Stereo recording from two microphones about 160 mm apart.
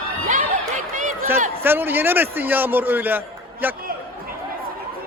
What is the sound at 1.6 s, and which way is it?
A man's voice, 10° right (ahead or behind).